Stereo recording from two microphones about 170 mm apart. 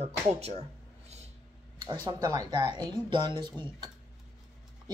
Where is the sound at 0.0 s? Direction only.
40° right (ahead or behind).